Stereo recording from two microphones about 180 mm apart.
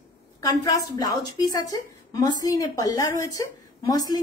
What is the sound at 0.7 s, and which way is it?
A woman's voice, 20° left (ahead or behind).